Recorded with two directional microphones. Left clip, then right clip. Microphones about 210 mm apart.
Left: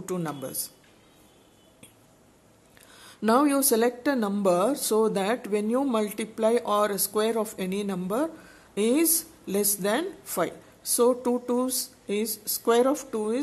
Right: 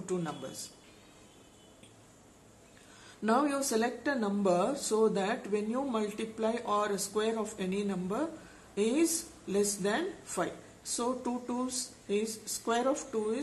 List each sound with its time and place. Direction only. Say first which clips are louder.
0.0 s speech: left 4 dB; 50° left (ahead or behind)
3.3 s speech: left 7 dB; 50° left (ahead or behind)